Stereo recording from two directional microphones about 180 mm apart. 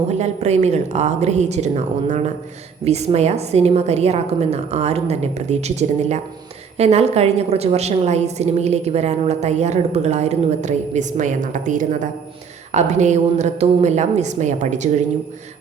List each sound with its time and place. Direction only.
0.2 s a woman's voice: 40° right (ahead or behind)